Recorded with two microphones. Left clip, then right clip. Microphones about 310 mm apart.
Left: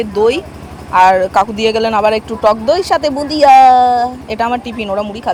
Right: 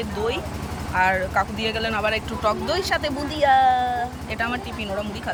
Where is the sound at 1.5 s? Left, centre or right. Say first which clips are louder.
Left 12 dB; centre.